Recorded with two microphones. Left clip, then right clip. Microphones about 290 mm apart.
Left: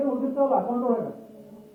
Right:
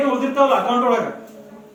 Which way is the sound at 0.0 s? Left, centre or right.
Right.